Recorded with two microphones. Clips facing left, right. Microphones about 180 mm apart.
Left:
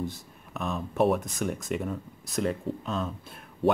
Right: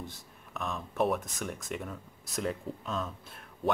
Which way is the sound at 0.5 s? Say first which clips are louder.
Left 5 dB; 5° left (ahead or behind).